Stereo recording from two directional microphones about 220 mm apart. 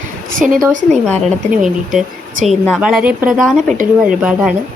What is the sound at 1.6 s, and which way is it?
A woman's voice, centre (ahead or behind).